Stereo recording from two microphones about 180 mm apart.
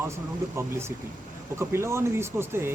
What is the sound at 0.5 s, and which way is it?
Speech, 15° right (ahead or behind).